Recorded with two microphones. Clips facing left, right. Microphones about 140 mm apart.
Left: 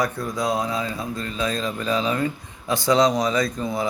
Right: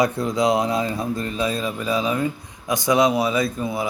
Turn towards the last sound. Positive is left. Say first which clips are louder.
# right 1 dB
turn(degrees=-5)  # may be behind; listen again after turning